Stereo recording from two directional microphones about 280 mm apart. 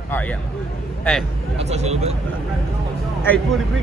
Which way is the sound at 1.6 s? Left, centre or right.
Right.